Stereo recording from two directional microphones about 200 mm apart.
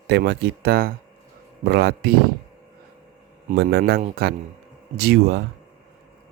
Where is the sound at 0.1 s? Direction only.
55° right (ahead or behind).